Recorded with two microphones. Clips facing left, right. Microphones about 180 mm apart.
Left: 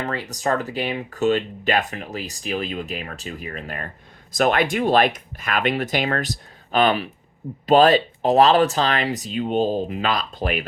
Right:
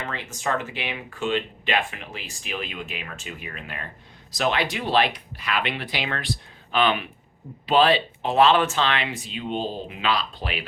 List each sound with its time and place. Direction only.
0.0 s speech: 40° left (ahead or behind)